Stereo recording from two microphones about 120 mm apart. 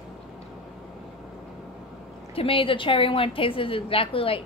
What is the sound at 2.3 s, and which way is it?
A woman's voice, 50° left (ahead or behind).